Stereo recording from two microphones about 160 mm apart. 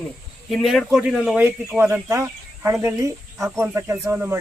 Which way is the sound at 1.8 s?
15° right (ahead or behind).